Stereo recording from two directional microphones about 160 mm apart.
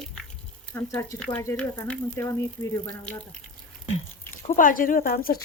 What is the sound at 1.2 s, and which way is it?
Speech, 10° left (ahead or behind).